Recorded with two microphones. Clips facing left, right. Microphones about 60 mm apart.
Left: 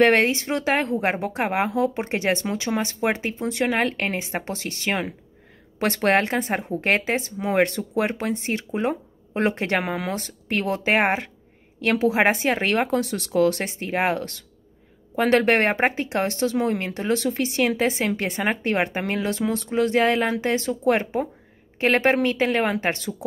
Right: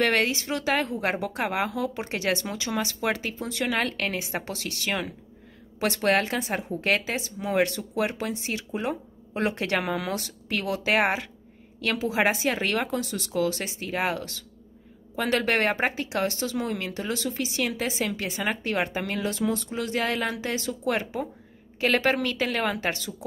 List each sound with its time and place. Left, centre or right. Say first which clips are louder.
0.0 s speech: left 6 dB; left
5.8 s speech: left 3 dB; left